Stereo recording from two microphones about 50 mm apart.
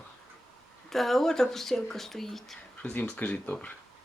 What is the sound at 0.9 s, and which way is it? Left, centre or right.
Speech, centre.